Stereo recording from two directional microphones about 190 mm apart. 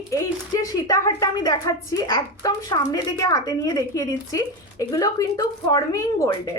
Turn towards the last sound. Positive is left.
turn(degrees=15)  # may be behind; listen again after turning